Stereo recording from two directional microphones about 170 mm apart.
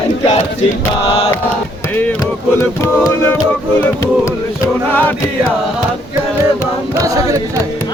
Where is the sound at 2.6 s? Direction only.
15° left (ahead or behind).